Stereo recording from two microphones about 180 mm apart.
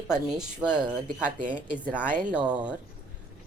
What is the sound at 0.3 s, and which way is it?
Speech, 5° right (ahead or behind).